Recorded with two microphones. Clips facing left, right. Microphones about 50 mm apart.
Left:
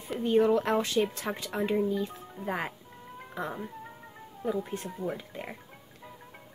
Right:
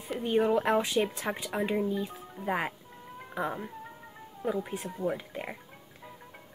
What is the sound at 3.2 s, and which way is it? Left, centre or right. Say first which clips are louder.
Cat: right 2 dB; centre.